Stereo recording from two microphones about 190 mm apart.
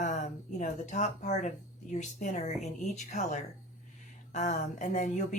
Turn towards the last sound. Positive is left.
turn(degrees=40)  # may be behind; listen again after turning